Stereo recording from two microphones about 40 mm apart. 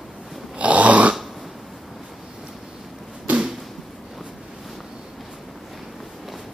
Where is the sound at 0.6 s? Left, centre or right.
Right.